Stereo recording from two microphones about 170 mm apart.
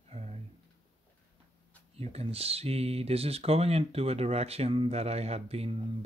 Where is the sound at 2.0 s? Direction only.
35° right (ahead or behind).